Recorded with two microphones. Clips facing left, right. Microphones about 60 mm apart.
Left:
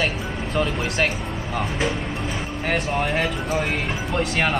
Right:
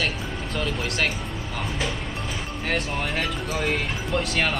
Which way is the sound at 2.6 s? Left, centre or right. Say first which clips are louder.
Left 4 dB; centre.